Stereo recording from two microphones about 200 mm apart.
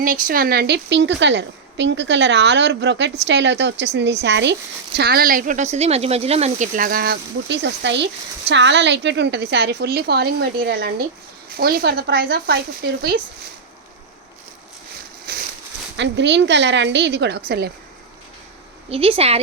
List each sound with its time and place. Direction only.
0.0 s a woman's voice: 45° right (ahead or behind)
15.3 s a sound: 50° right (ahead or behind)
16.0 s a woman's voice: 60° right (ahead or behind)
18.9 s speech: 30° right (ahead or behind)